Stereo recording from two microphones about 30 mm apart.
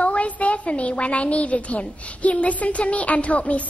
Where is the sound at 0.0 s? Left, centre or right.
Left.